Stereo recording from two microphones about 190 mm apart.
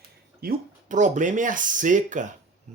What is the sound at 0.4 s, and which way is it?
Speech, 40° right (ahead or behind).